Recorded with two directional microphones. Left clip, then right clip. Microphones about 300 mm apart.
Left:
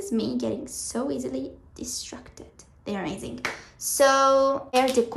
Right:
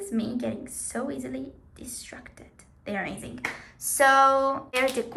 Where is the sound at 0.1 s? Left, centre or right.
Centre.